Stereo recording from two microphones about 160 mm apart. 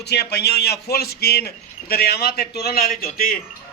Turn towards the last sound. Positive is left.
turn(degrees=65)  # may be behind; listen again after turning